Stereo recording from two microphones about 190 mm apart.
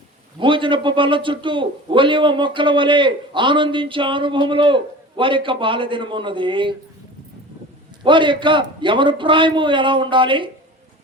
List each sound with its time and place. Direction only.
0.3 s a man's voice: 25° right (ahead or behind)
8.0 s a man's voice: 25° right (ahead or behind)